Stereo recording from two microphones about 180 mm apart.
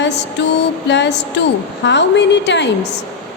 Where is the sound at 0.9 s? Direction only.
75° left (ahead or behind).